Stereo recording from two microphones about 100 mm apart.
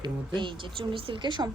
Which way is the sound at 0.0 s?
50° right (ahead or behind).